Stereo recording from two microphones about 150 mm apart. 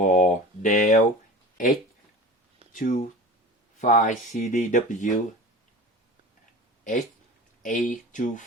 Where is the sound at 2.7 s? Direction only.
60° left (ahead or behind).